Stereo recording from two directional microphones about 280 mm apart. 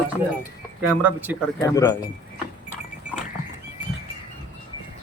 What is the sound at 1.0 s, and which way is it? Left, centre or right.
Speech, centre.